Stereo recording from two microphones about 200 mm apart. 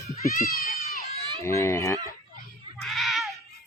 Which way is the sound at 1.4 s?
15° left (ahead or behind).